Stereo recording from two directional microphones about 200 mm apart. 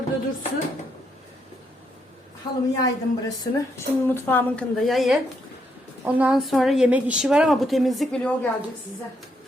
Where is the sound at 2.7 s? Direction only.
20° left (ahead or behind).